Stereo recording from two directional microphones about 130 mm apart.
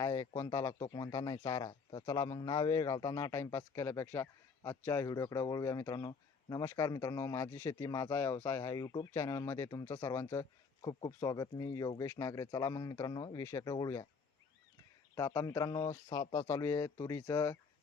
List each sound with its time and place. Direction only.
0.0 s speech: 25° left (ahead or behind)
15.1 s speech: 25° left (ahead or behind)